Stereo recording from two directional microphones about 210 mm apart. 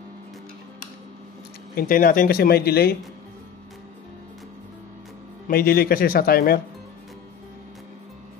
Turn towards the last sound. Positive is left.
turn(degrees=45)  # may be behind; listen again after turning